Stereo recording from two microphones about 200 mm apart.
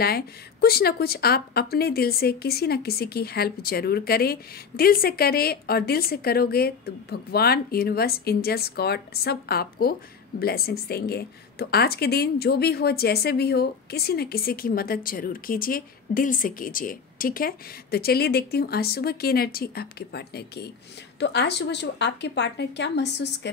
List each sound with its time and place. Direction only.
0.0 s a woman's voice: 50° left (ahead or behind)